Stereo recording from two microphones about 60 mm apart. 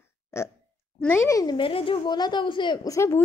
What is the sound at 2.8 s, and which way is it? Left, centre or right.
Speech, left.